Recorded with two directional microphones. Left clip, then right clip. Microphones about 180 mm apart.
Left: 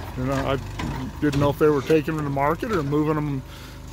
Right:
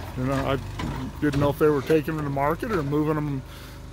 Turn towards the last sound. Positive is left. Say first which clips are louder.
# left 2 dB
turn(degrees=5)  # may be behind; listen again after turning